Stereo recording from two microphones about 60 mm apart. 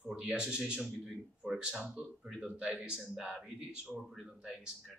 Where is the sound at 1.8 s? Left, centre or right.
Centre.